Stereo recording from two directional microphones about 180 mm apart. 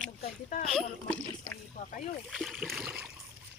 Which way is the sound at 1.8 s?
45° left (ahead or behind).